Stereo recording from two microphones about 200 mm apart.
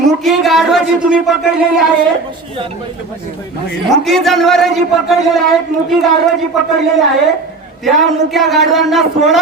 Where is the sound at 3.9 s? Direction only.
Centre (ahead or behind).